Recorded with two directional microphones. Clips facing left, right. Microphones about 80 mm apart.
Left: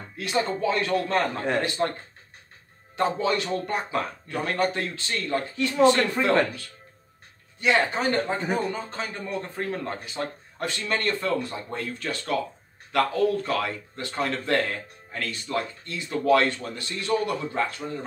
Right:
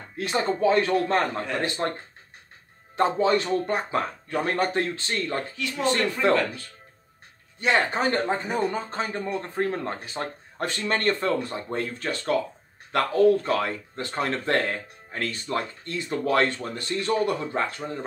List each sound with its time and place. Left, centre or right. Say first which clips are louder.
0.2 s speech: right 2 dB; right
3.0 s speech: right 3 dB; right
5.6 s speech: left 6 dB; left
7.6 s speech: even; right